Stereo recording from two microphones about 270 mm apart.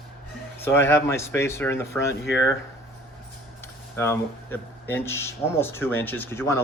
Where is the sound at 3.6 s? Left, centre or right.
Centre.